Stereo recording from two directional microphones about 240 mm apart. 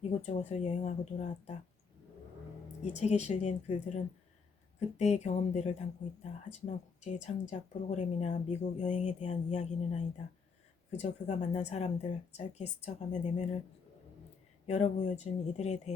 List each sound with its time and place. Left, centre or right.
0.0 s speech: left
2.8 s speech: left
14.7 s speech: left